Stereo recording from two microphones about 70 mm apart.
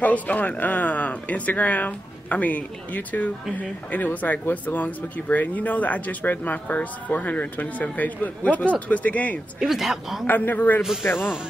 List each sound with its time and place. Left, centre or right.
0.0 s speech: left
9.6 s speech: centre
10.2 s speech: left
10.8 s speech: centre
11.1 s speech: left